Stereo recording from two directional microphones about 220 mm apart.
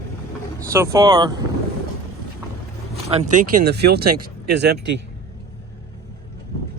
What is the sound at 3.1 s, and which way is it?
Speech, 30° right (ahead or behind).